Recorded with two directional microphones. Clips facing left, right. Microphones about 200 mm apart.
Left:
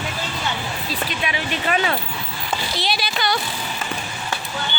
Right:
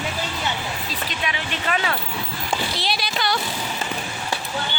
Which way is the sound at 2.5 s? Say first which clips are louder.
Left 1 dB; centre (ahead or behind).